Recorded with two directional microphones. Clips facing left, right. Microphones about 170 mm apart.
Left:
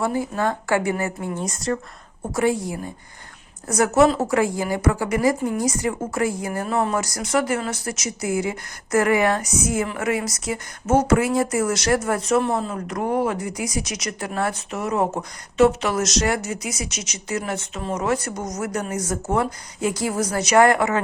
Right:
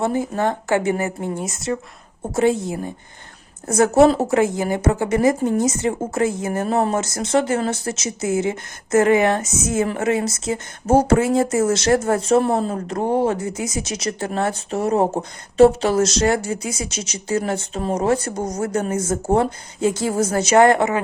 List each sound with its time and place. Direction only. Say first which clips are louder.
0.0 s speech: right 2 dB; 25° right (ahead or behind)
2.3 s speech: right 3 dB; 25° right (ahead or behind)